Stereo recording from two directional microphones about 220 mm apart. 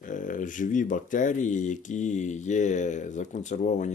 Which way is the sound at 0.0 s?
35° left (ahead or behind).